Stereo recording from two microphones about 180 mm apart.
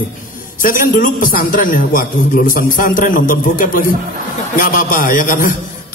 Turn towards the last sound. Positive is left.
turn(degrees=50)  # may be behind; listen again after turning